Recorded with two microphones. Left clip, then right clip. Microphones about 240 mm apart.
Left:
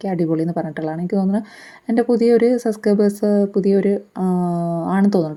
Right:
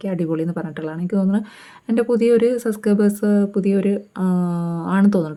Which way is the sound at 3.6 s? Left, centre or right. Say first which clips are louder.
Left 3 dB; centre.